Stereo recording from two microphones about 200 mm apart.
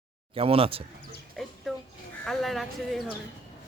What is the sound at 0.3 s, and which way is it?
Speech, 30° right (ahead or behind).